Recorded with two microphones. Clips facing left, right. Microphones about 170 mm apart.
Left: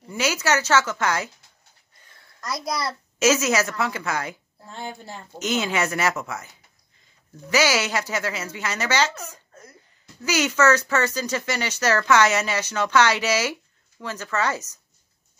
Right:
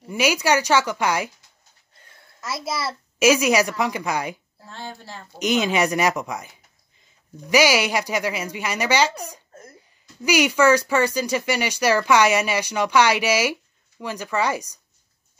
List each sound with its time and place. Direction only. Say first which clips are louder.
0.1 s speech: right 3 dB; 15° right (ahead or behind)
2.4 s a child's voice: even; 5° right (ahead or behind)
4.6 s a woman's voice: left 1 dB; centre (ahead or behind)
5.4 s speech: right 4 dB; 15° right (ahead or behind)